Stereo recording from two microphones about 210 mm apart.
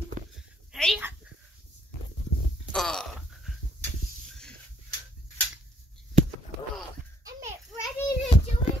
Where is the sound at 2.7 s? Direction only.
5° left (ahead or behind).